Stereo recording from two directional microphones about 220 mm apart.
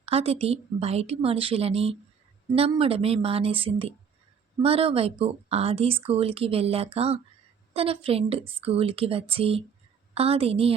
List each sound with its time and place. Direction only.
0.0 s a woman's voice: 25° right (ahead or behind)